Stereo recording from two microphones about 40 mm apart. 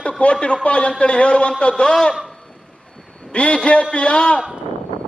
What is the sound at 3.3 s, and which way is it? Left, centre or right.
A man's voice, left.